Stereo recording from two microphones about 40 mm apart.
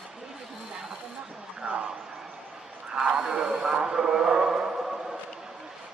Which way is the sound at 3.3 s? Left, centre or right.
Centre.